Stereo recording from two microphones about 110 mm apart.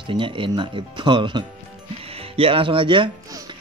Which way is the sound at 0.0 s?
50° right (ahead or behind).